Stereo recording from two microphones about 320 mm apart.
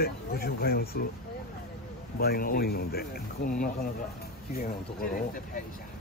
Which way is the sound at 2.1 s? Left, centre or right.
Left.